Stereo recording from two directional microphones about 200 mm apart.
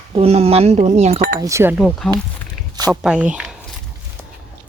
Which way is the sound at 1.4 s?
15° right (ahead or behind).